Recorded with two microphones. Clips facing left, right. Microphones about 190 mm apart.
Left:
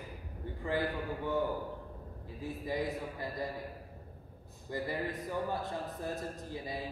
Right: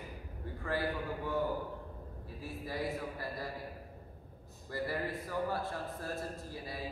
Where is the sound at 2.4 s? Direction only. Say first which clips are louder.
Left 4 dB; 20° left (ahead or behind).